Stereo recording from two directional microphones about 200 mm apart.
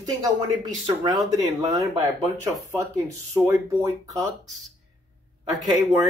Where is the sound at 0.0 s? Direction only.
20° right (ahead or behind).